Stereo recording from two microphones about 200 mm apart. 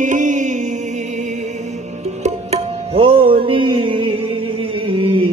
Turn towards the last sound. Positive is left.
turn(degrees=-25)  # may be behind; listen again after turning